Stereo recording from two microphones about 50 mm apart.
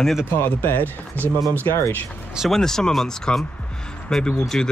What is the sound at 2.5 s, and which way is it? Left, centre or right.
Speech, centre.